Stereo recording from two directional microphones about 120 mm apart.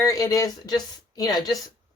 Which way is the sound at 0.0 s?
25° left (ahead or behind).